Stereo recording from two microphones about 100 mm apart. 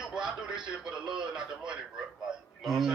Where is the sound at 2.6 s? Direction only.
5° right (ahead or behind).